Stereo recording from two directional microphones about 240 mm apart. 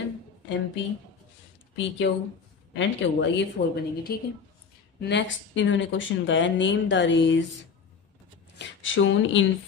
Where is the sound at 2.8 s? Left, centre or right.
Left.